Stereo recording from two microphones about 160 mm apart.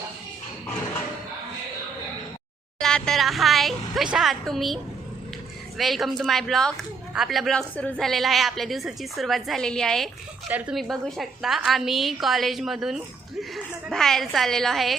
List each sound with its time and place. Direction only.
2.7 s speech: 5° left (ahead or behind)